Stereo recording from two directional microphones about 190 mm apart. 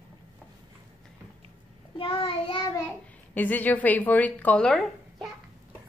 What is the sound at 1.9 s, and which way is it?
Child singing, 25° left (ahead or behind).